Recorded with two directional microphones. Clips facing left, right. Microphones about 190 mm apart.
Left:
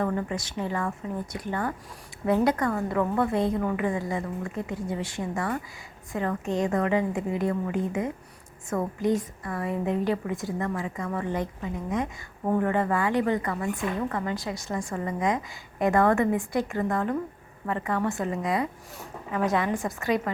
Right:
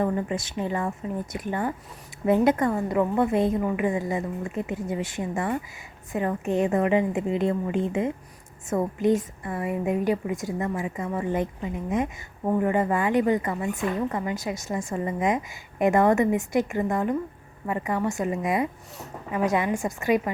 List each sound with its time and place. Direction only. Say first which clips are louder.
0.0 s a woman's voice: right 2 dB; 20° right (ahead or behind)